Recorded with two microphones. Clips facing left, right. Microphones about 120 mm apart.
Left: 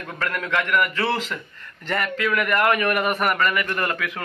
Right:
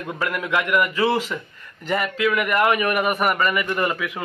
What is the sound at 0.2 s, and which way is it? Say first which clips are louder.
A man's voice: right 1 dB; 10° right (ahead or behind).